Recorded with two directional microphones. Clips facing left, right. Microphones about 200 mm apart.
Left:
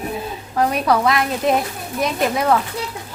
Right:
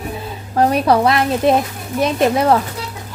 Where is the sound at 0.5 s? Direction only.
35° right (ahead or behind).